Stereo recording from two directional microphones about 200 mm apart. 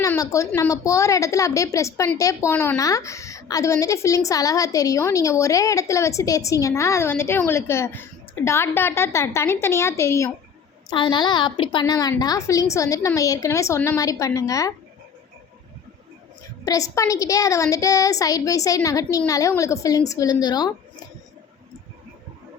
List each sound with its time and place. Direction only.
0.0 s a woman's voice: 15° left (ahead or behind)
16.6 s a woman's voice: 15° left (ahead or behind)